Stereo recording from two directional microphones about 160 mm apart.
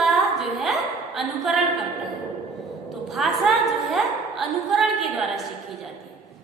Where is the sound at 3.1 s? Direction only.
Centre (ahead or behind).